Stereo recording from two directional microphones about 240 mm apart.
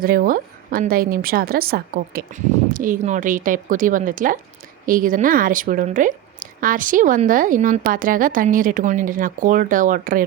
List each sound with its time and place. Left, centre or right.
0.0 s a woman's voice: right